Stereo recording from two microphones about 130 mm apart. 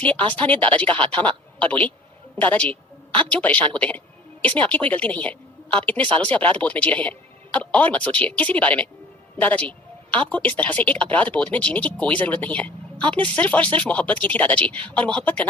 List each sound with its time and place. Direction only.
0.0 s a man's voice: 10° left (ahead or behind)
6.1 s speech: 40° right (ahead or behind)
6.3 s speech: 10° left (ahead or behind)